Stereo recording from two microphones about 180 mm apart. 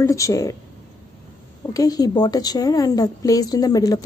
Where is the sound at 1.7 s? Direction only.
20° left (ahead or behind).